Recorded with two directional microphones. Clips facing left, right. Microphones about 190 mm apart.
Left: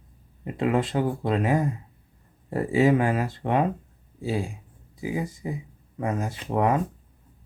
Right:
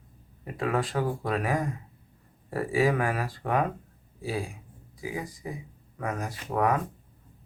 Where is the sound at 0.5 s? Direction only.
25° left (ahead or behind).